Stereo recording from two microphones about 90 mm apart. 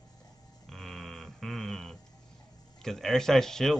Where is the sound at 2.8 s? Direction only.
5° left (ahead or behind).